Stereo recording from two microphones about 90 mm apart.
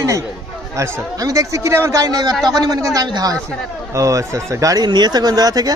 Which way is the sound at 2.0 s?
45° right (ahead or behind).